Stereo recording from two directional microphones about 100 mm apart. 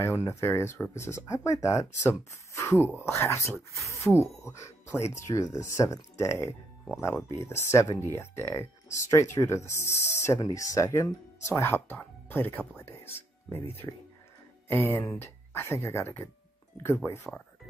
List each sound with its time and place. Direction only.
0.0 s speech: 25° left (ahead or behind)